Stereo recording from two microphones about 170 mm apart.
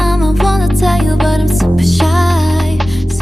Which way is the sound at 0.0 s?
Centre (ahead or behind).